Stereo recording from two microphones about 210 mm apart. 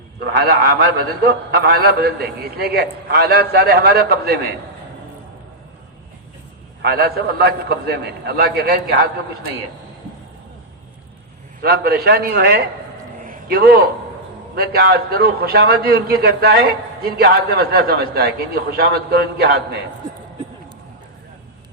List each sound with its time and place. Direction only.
0.3 s a man's voice: 50° right (ahead or behind)
6.8 s a man's voice: 50° right (ahead or behind)
11.6 s a man's voice: 50° right (ahead or behind)
13.2 s a sound: 45° right (ahead or behind)
14.5 s a man's voice: 50° right (ahead or behind)